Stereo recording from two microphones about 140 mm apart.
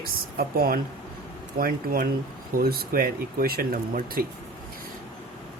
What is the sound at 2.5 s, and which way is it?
Speech, 90° right.